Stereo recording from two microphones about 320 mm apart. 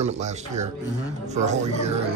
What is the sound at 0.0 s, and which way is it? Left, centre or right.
Speech, right.